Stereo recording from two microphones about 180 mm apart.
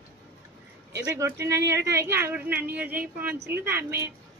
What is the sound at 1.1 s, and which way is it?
Speech, 15° right (ahead or behind).